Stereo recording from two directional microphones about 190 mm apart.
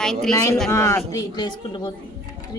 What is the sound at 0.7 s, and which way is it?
Speech, 15° left (ahead or behind).